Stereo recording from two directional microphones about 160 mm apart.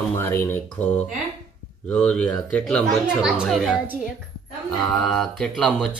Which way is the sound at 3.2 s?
5° right (ahead or behind).